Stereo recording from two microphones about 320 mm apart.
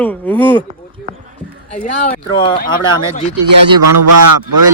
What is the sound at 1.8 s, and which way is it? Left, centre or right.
Speech, centre.